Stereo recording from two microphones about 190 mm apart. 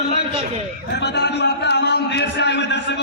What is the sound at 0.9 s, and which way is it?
A man's voice, 65° left (ahead or behind).